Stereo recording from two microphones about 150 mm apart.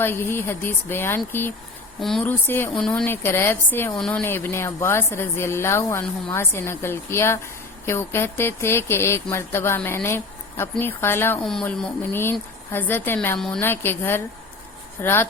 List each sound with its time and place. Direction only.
0.0 s speech: 15° left (ahead or behind)
2.0 s speech: centre (ahead or behind)
2.2 s speech: 15° left (ahead or behind)
11.4 s speech: 5° left (ahead or behind)
12.1 s speech: 15° left (ahead or behind)